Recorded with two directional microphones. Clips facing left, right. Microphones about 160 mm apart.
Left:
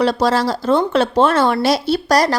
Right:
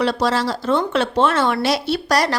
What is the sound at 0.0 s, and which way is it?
A woman's voice, 40° left (ahead or behind).